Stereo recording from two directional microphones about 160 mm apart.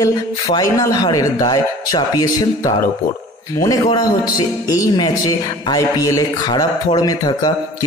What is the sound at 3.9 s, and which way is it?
Speech, 25° left (ahead or behind).